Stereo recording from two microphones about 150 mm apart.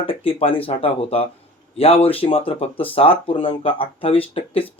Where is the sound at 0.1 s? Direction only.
40° left (ahead or behind).